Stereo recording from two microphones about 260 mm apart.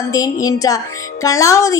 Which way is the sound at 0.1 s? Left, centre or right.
Centre.